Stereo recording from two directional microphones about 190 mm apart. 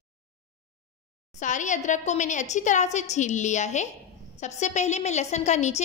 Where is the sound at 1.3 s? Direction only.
40° left (ahead or behind).